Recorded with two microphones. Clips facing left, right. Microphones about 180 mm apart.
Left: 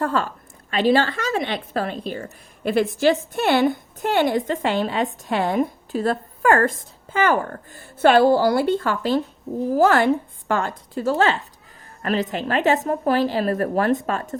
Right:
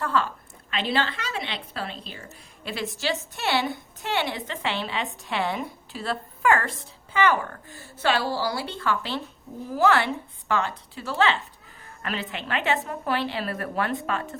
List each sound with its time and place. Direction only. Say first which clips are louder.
0.0 s a woman's voice: left 3 dB; 45° left (ahead or behind)